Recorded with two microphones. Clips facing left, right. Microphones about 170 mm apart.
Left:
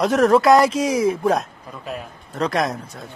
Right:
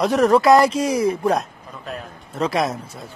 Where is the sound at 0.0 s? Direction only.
Centre (ahead or behind).